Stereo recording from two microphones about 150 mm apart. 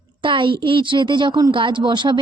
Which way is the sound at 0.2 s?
35° right (ahead or behind).